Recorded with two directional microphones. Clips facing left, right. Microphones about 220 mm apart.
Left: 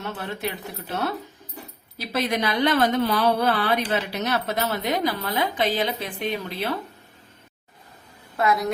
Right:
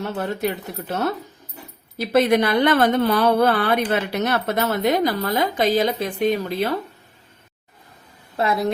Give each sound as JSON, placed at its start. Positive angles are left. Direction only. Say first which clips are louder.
{"t": 0.0, "sound": "a woman's voice", "louder": "right 6 dB", "side_deg": -45}
{"t": 8.4, "sound": "a woman's voice", "louder": "right 1 dB", "side_deg": -30}